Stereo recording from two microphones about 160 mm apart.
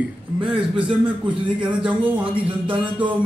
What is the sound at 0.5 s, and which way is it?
Speech, 30° right (ahead or behind).